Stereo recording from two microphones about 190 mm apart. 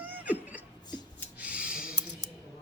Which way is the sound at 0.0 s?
10° right (ahead or behind).